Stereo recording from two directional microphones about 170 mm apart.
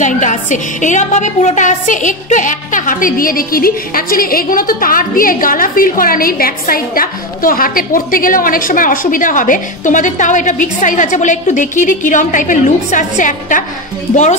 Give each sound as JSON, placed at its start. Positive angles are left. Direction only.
{"t": 0.0, "sound": "a woman's voice", "side_deg": 50}